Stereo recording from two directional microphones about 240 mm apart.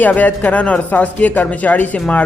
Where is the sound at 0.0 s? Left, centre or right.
Centre.